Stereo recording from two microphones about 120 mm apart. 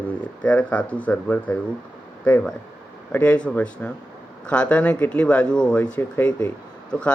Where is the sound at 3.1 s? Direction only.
10° left (ahead or behind).